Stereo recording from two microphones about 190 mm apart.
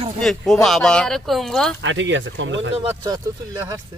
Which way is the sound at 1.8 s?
75° right (ahead or behind).